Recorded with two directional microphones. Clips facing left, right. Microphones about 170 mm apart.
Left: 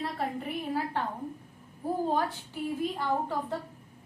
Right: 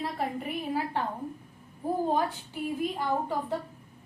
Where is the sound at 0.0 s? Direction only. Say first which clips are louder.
Right 1 dB; 15° right (ahead or behind).